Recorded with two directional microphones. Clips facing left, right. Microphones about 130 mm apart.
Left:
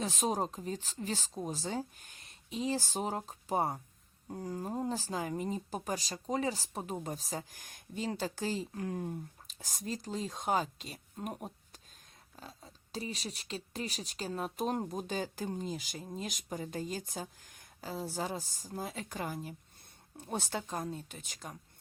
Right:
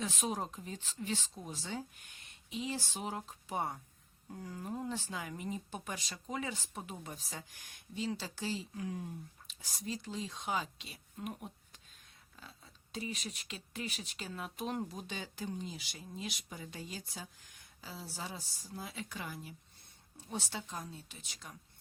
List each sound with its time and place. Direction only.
0.0 s speech: 40° left (ahead or behind)